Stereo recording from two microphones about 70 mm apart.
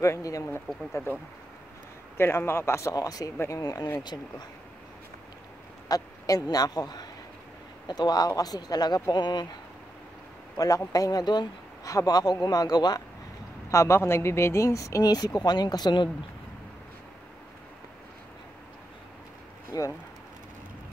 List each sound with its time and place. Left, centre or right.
0.0 s speech: left
2.1 s a man's voice: left
2.9 s speech: left
4.0 s speech: left
5.9 s a man's voice: left
9.1 s speech: left
10.6 s speech: left
11.8 s speech: left
13.7 s speech: left
19.7 s speech: left